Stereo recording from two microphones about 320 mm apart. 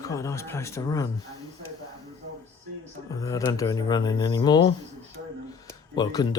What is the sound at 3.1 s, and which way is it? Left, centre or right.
Speech, centre.